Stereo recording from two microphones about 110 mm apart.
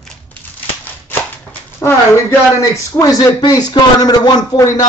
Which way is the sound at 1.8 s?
25° left (ahead or behind).